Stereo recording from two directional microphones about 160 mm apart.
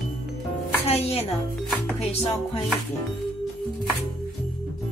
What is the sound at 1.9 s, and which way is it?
Chopping, 40° left (ahead or behind).